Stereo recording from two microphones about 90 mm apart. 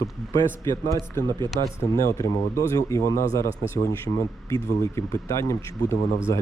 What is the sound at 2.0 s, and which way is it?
A man's voice, 35° left (ahead or behind).